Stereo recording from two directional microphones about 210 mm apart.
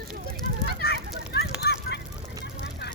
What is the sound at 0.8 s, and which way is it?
Children playing, 50° left (ahead or behind).